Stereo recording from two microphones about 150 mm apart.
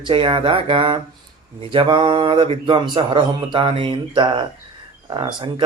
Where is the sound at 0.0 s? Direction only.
35° right (ahead or behind).